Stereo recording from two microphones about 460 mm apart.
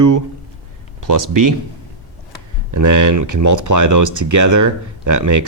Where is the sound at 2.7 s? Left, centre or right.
Right.